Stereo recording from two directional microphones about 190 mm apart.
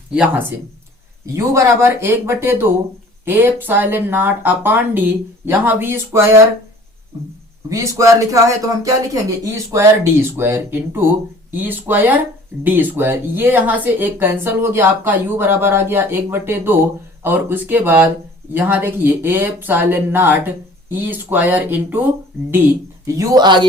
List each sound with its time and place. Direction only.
0.1 s speech: 5° right (ahead or behind)
7.7 s speech: 15° right (ahead or behind)
23.1 s speech: 20° right (ahead or behind)